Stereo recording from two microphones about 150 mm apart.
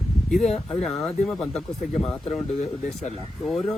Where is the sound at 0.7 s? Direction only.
Centre (ahead or behind).